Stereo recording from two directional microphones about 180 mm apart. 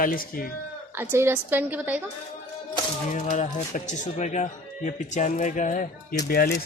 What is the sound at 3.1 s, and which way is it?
Speech, 40° left (ahead or behind).